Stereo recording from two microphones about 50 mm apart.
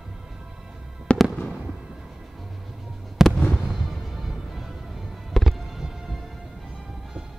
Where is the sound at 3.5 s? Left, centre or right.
Centre.